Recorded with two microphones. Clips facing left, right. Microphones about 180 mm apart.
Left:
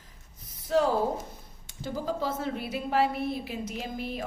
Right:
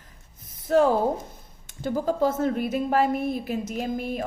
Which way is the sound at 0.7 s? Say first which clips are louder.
Right 5 dB; 50° right (ahead or behind).